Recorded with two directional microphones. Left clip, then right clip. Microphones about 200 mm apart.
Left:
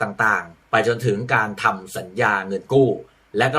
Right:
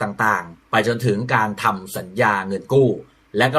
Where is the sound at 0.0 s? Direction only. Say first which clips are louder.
Even; 5° left (ahead or behind).